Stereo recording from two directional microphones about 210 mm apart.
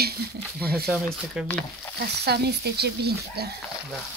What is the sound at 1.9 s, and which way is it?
Speech, 50° right (ahead or behind).